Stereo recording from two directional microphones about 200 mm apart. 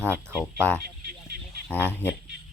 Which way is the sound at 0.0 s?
10° right (ahead or behind).